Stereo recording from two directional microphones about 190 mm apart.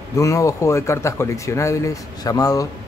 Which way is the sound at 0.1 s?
15° left (ahead or behind).